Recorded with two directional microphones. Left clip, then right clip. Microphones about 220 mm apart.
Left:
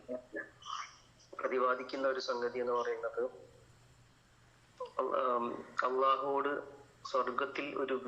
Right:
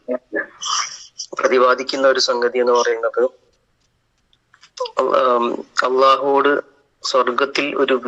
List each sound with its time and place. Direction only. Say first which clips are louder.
0.1 s a sound: right 19 dB; 45° right (ahead or behind)
1.4 s speech: right 19 dB; 50° right (ahead or behind)
4.7 s speech: right 18 dB; 50° right (ahead or behind)